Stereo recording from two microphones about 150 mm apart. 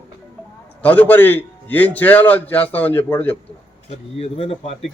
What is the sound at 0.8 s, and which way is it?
A man's voice, 10° left (ahead or behind).